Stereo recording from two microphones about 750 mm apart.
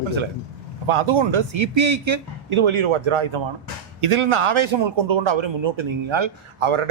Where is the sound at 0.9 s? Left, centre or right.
Right.